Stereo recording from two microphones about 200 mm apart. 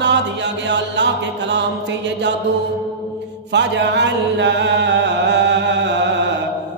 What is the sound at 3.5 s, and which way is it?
Chant, 60° right (ahead or behind).